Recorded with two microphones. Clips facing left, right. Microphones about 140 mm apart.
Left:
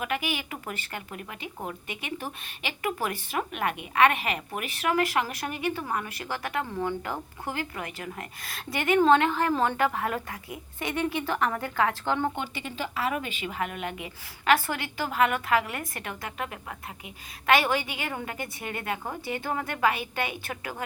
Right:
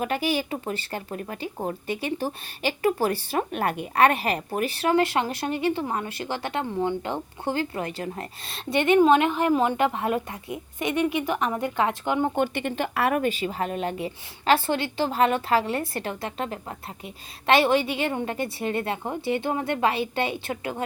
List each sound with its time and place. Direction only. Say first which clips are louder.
0.0 s speech: right 6 dB; 35° right (ahead or behind); by 12.3 s 15° right (ahead or behind)
12.4 s speech: right 8 dB; 60° right (ahead or behind)
13.3 s a woman's voice: right 5 dB; 35° right (ahead or behind)